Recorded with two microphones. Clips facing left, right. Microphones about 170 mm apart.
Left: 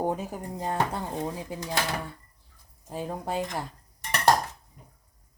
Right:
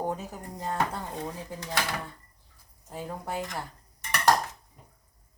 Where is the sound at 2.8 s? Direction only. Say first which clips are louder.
Left 4 dB; 20° left (ahead or behind).